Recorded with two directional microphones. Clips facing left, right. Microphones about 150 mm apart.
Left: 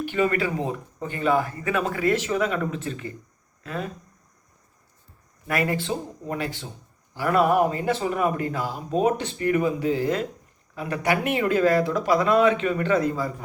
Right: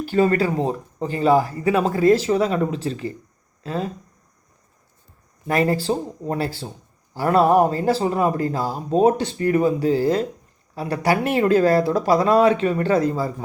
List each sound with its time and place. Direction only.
0.0 s speech: 35° right (ahead or behind)
5.5 s speech: 35° right (ahead or behind)